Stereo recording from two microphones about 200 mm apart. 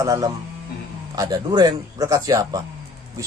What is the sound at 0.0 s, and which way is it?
A man's voice, 15° right (ahead or behind).